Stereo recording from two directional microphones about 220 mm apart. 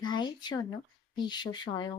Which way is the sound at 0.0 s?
20° left (ahead or behind).